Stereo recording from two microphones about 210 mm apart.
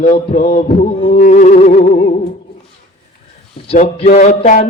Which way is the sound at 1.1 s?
35° left (ahead or behind).